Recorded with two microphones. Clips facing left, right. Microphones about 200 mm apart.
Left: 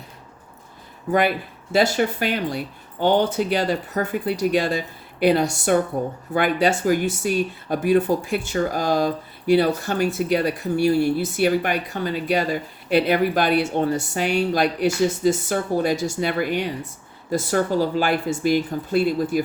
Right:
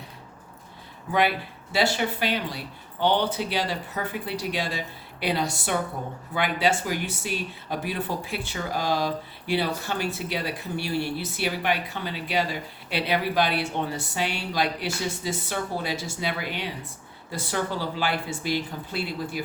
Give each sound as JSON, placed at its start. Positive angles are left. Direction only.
{"t": 1.7, "sound": "speech", "side_deg": 45}